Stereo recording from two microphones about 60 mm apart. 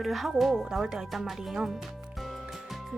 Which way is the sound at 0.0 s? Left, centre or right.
Centre.